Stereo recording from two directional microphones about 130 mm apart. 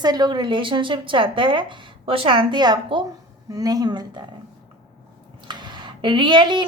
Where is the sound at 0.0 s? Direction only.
30° right (ahead or behind).